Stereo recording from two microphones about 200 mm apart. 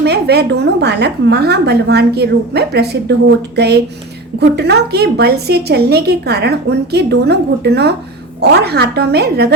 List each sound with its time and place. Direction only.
0.0 s a woman's voice: 55° right (ahead or behind)